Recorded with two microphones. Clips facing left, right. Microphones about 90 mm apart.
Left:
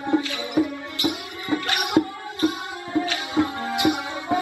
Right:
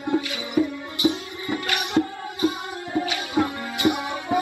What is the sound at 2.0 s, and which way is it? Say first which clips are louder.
Music: left 2 dB; 40° left (ahead or behind).